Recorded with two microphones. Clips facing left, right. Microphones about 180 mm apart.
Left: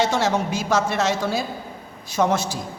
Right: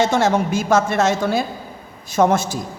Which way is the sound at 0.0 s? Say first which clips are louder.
Right 4 dB; 50° right (ahead or behind).